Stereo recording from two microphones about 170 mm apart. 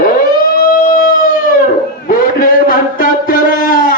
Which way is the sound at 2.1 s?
55° left (ahead or behind).